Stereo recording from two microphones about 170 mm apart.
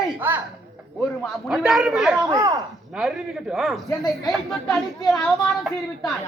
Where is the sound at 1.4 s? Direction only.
5° right (ahead or behind).